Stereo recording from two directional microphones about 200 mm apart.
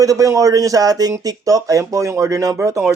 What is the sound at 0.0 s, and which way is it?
Speech, 15° right (ahead or behind).